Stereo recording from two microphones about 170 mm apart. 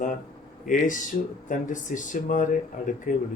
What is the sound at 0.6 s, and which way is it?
A man's voice, 50° left (ahead or behind).